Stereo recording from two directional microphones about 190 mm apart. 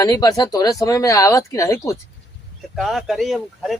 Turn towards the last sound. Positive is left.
turn(degrees=0)  # may be behind; listen again after turning